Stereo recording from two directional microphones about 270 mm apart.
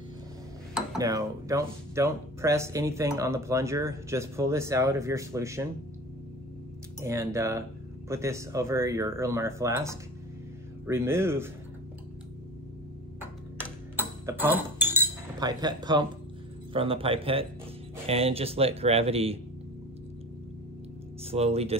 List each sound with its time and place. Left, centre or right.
0.9 s speech: centre
7.0 s speech: centre
13.9 s chink: centre
16.7 s speech: centre
21.3 s speech: right